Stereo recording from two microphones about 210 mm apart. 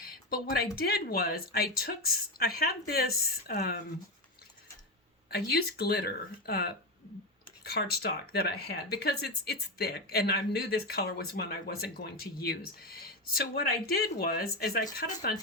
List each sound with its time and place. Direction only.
0.0 s speech: 45° left (ahead or behind)
5.3 s speech: 50° left (ahead or behind)
14.9 s speech: 40° left (ahead or behind)